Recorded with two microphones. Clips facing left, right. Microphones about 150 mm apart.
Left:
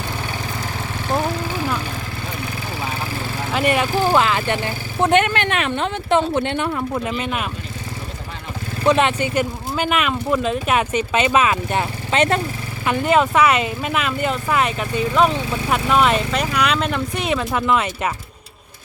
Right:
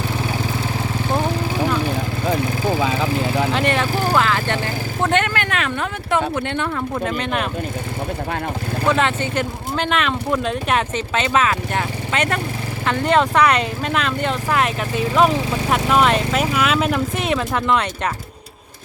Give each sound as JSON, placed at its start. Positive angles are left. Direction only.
{"t": 2.7, "sound": "vehicle", "side_deg": -90}
{"t": 3.5, "sound": "speech", "side_deg": 10}
{"t": 6.9, "sound": "speech", "side_deg": 5}
{"t": 8.9, "sound": "speech", "side_deg": 20}
{"t": 12.8, "sound": "speech", "side_deg": 5}